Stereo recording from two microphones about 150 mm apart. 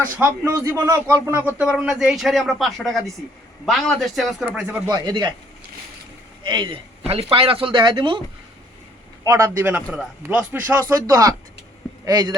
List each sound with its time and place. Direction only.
0.0 s a man's voice: 20° right (ahead or behind)
4.9 s a man's voice: 30° right (ahead or behind)
6.4 s speech: 30° right (ahead or behind)
9.2 s a man's voice: 20° right (ahead or behind)